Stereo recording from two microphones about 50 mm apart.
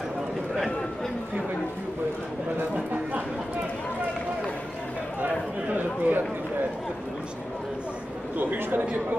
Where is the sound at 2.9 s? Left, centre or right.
Right.